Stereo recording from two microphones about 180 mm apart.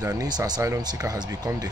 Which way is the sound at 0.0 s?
20° right (ahead or behind).